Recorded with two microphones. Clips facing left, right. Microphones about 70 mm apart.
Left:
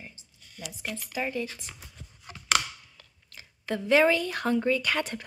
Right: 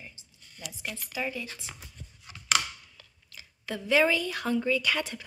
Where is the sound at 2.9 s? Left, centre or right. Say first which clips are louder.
Even; left.